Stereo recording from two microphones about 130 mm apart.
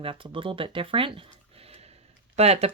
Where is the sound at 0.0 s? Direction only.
40° right (ahead or behind).